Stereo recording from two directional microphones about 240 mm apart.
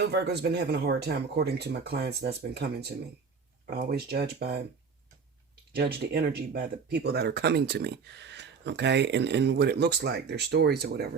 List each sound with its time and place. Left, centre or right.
0.0 s speech: right
3.7 s speech: right
5.7 s speech: right